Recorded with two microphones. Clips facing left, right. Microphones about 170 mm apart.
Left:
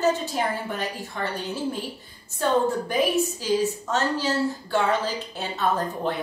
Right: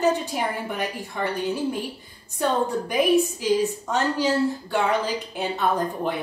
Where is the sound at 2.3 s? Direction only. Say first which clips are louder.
Left 1 dB; 15° right (ahead or behind).